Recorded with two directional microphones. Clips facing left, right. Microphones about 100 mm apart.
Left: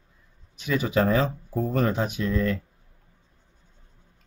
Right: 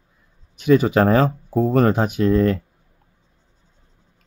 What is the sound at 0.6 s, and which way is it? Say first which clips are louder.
Speech: right 8 dB; 50° right (ahead or behind).